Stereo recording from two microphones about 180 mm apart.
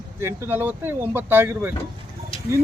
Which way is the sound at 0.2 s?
15° right (ahead or behind).